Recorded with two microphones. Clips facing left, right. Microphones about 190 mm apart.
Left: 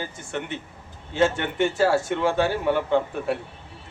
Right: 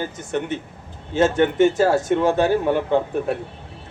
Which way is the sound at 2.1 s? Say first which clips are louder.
Right 5 dB; 40° right (ahead or behind).